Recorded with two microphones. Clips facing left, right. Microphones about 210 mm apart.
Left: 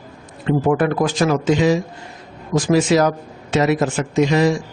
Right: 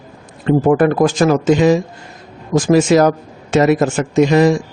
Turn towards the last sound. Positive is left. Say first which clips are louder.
# right 4 dB
turn(degrees=-50)  # may be behind; listen again after turning